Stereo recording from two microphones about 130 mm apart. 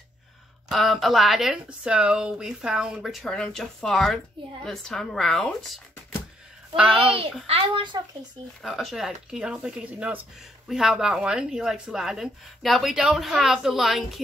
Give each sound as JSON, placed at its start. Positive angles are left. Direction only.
{"t": 0.7, "sound": "speech", "side_deg": 0}
{"t": 6.8, "sound": "a woman's voice", "side_deg": -10}
{"t": 7.4, "sound": "a child's voice", "side_deg": -45}
{"t": 8.6, "sound": "speech", "side_deg": 0}